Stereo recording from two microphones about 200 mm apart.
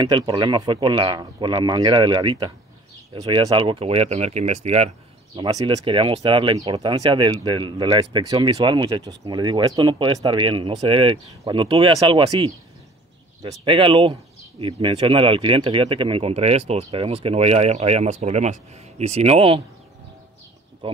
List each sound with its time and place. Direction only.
0.0 s speech: 20° right (ahead or behind)
5.5 s speech: 20° right (ahead or behind)
20.8 s speech: 25° right (ahead or behind)